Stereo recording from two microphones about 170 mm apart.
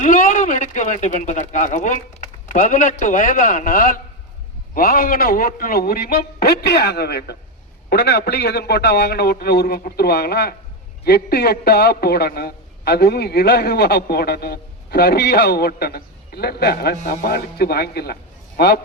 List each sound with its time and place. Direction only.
0.0 s a man's voice: 50° left (ahead or behind); by 7.3 s 70° left (ahead or behind)
7.9 s a man's voice: 85° left